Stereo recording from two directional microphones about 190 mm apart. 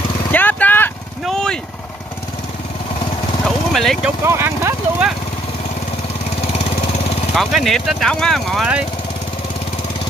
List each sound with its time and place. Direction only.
0.3 s vehicle: 10° left (ahead or behind)
3.4 s vehicle: centre (ahead or behind)
4.3 s a sound: 15° right (ahead or behind)
7.3 s speech: centre (ahead or behind)